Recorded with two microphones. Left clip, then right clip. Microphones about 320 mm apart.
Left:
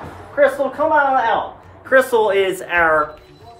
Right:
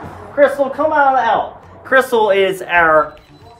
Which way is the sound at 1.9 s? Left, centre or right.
Centre.